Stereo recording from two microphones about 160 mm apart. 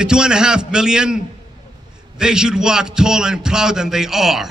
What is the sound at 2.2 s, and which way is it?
A man's voice, 5° right (ahead or behind).